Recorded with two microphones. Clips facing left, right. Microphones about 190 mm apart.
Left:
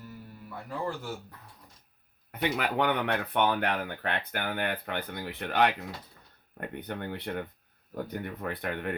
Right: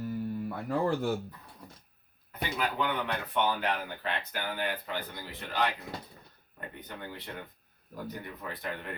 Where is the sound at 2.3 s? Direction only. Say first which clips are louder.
Left 3 dB; 70° left (ahead or behind).